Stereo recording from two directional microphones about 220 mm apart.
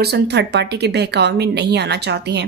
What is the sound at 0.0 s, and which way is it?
Speech, 50° right (ahead or behind).